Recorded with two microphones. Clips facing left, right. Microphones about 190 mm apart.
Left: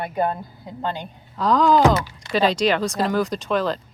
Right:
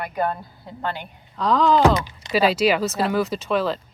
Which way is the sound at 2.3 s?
5° right (ahead or behind).